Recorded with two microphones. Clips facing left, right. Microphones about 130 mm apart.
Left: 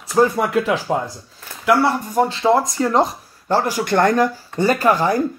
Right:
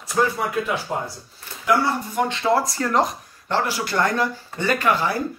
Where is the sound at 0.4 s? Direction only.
90° left.